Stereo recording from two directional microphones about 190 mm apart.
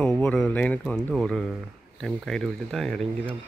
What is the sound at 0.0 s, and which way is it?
Speech, 5° left (ahead or behind).